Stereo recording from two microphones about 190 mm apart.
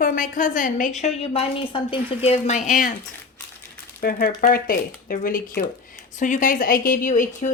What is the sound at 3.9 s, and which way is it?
A woman's voice, 50° left (ahead or behind).